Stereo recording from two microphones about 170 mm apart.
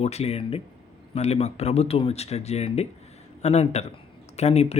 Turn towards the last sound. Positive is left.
turn(degrees=40)  # may be behind; listen again after turning